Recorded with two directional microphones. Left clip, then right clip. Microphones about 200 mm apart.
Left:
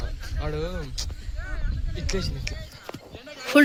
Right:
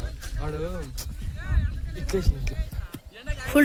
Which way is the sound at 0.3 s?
50° right (ahead or behind).